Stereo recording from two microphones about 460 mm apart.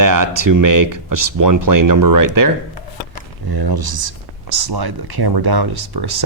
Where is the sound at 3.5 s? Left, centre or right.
Right.